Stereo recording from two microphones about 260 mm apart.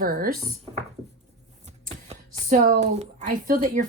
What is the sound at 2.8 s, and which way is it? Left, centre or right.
Speech, right.